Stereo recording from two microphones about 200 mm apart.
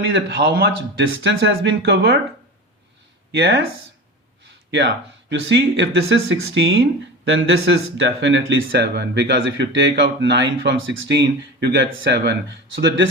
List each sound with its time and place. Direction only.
0.1 s speech: 60° right (ahead or behind)
3.3 s speech: 60° right (ahead or behind)
5.3 s speech: 60° right (ahead or behind)